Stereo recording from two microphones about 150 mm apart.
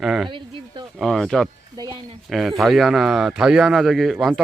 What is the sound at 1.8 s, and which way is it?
Speech, 30° right (ahead or behind).